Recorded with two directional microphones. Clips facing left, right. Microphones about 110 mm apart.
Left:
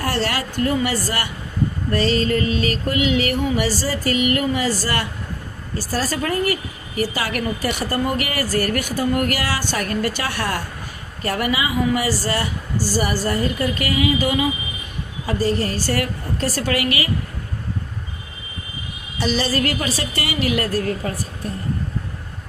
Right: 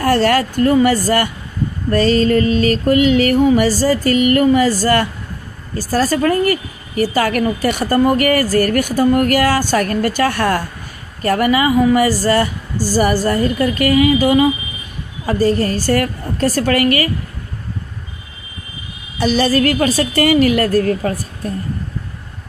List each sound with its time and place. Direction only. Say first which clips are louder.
0.0 s speech: right 9 dB; 45° right (ahead or behind)
19.1 s speech: right 7 dB; 50° right (ahead or behind)